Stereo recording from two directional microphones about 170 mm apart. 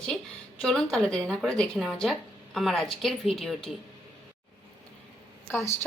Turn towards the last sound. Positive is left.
turn(degrees=15)  # may be behind; listen again after turning